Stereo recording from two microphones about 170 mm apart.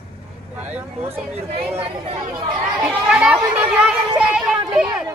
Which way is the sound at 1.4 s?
35° right (ahead or behind).